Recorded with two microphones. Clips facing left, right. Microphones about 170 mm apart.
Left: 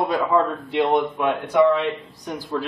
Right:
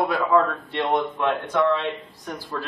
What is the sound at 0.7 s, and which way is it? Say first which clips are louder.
A man's voice: left 5 dB; 10° left (ahead or behind).